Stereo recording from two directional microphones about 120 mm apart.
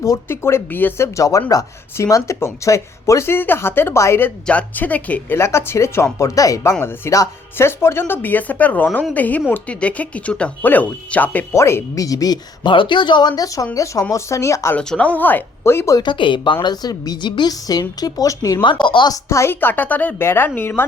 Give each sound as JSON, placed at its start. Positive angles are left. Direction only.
{"t": 0.0, "sound": "a woman's voice", "side_deg": 25}
{"t": 14.8, "sound": "speech", "side_deg": 10}
{"t": 16.0, "sound": "a woman's voice", "side_deg": 40}
{"t": 18.6, "sound": "a woman's voice", "side_deg": 40}
{"t": 19.1, "sound": "speech", "side_deg": 25}